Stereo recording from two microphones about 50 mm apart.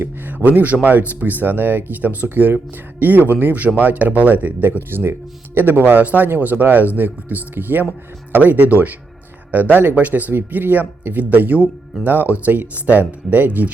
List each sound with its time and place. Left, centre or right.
0.0 s speech: right
4.9 s speech: right